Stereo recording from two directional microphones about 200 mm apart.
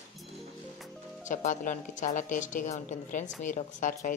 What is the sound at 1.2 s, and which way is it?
A woman's voice, 40° left (ahead or behind).